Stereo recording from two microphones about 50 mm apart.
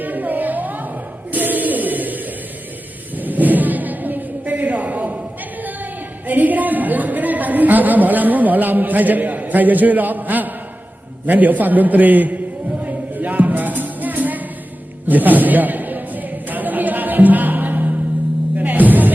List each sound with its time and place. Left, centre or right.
0.0 s a sound: right
15.0 s a capella: right
18.5 s music: right